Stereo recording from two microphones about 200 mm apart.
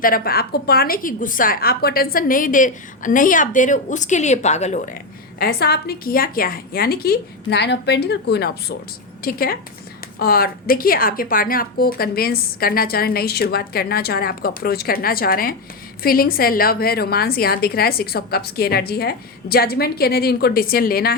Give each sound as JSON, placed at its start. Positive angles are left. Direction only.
{"t": 0.0, "sound": "a woman's voice", "side_deg": 45}
{"t": 5.4, "sound": "a woman's voice", "side_deg": 50}